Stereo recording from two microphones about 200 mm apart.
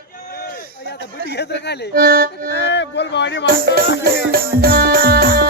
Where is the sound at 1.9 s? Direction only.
50° right (ahead or behind).